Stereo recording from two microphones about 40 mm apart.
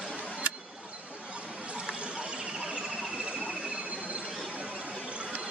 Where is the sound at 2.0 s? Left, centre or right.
Right.